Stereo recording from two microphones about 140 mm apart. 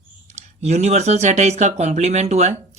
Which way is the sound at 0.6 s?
55° right (ahead or behind).